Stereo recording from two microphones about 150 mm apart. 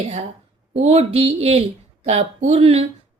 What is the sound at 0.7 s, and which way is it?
Speech, 45° right (ahead or behind).